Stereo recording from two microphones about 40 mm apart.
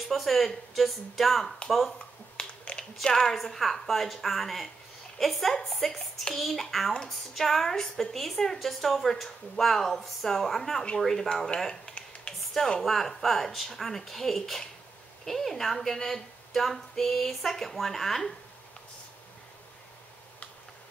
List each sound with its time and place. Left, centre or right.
0.1 s a woman's voice: centre
2.3 s finger snapping: left
3.1 s a woman's voice: centre
12.3 s a sound: centre
12.8 s a woman's voice: centre